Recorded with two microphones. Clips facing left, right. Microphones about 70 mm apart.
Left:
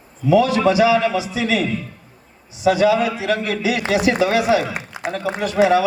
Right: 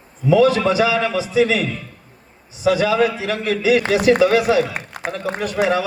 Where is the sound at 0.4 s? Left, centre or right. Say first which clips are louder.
Even; right.